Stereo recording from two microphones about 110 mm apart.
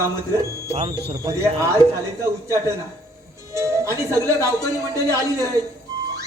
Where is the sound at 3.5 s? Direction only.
25° right (ahead or behind).